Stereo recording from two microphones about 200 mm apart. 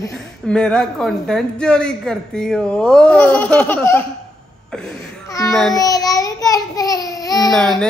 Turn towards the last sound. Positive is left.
turn(degrees=5)  # may be behind; listen again after turning